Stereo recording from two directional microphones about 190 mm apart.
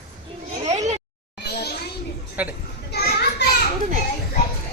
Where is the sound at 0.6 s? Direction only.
35° right (ahead or behind).